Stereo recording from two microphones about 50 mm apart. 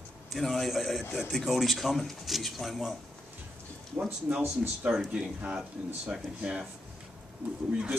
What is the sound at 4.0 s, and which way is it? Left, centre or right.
Speech, right.